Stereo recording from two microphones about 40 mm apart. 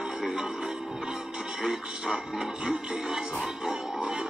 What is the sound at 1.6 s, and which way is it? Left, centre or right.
Speech, centre.